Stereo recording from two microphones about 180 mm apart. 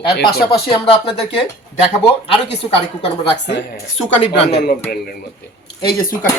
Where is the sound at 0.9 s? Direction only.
30° left (ahead or behind).